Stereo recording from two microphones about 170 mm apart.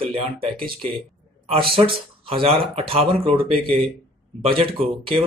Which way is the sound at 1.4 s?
30° right (ahead or behind).